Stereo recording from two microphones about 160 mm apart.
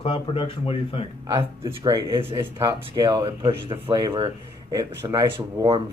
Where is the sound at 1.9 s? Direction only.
20° right (ahead or behind).